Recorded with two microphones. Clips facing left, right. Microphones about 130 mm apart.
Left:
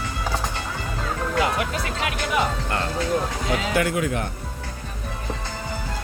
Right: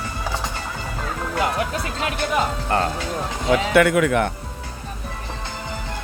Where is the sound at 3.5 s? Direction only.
65° right (ahead or behind).